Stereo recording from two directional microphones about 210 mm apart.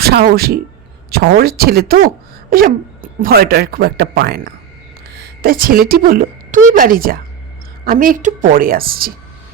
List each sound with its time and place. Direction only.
0.0 s speech: 50° right (ahead or behind)